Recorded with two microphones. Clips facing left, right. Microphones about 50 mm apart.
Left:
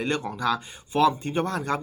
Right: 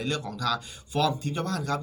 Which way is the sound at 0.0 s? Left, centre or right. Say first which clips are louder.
Left 4 dB; left.